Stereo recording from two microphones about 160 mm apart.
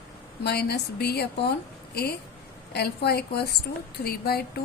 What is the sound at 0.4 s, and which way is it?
A woman's voice, 85° left.